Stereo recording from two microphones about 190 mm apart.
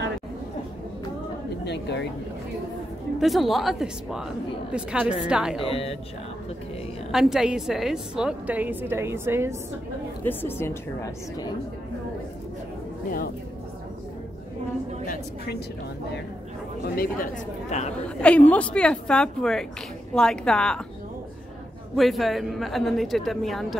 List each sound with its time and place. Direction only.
1.6 s speech: 65° left (ahead or behind)
3.2 s a woman's voice: centre (ahead or behind)
5.6 s speech: 30° left (ahead or behind)
7.1 s a woman's voice: centre (ahead or behind)
10.2 s a woman's voice: 10° left (ahead or behind)
15.0 s speech: 55° left (ahead or behind)
16.9 s speech: 50° left (ahead or behind)
17.6 s a woman's voice: 35° left (ahead or behind)
18.0 s a woman's voice: 5° left (ahead or behind)
21.9 s a woman's voice: centre (ahead or behind)